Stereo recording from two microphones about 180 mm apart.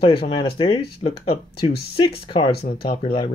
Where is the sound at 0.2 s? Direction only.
30° left (ahead or behind).